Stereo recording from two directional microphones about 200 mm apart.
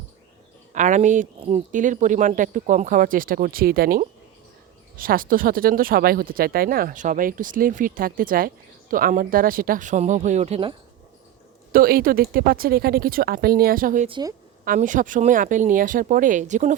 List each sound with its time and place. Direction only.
0.7 s speech: 40° right (ahead or behind)
11.7 s speech: 45° right (ahead or behind)
14.1 s a woman's voice: 20° right (ahead or behind)
14.6 s speech: 40° right (ahead or behind)